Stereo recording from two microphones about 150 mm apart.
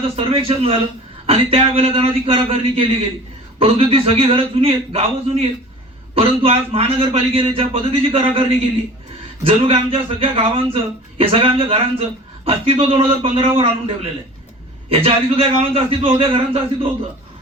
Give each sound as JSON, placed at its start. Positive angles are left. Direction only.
{"t": 0.2, "sound": "speech", "side_deg": -40}